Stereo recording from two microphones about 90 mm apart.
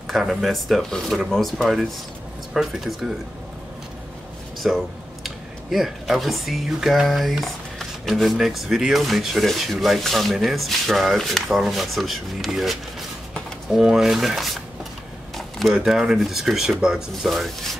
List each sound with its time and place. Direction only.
0.1 s speech: centre (ahead or behind)
4.6 s speech: centre (ahead or behind)
15.7 s speech: 5° right (ahead or behind)